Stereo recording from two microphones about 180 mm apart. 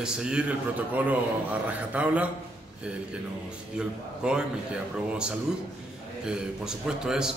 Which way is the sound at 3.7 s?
5° right (ahead or behind).